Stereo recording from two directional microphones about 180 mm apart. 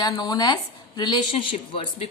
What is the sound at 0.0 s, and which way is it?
Speech, 20° left (ahead or behind).